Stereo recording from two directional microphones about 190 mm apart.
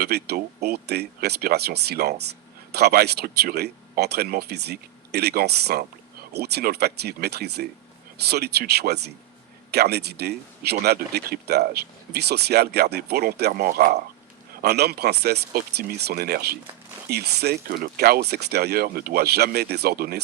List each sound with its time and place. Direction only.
0.0 s speech: 60° right (ahead or behind)